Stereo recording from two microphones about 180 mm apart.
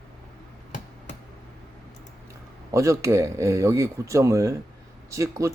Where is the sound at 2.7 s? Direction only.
15° right (ahead or behind).